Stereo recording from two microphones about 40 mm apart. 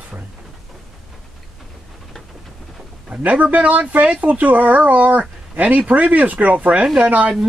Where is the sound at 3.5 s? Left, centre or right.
Right.